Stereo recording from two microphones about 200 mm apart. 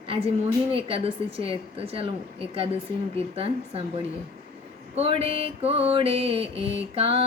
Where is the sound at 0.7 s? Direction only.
30° right (ahead or behind).